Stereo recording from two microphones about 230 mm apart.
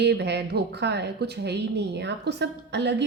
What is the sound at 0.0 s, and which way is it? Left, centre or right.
A woman's voice, right.